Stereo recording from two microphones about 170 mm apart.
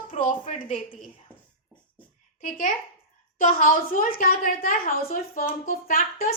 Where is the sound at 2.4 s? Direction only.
50° left (ahead or behind).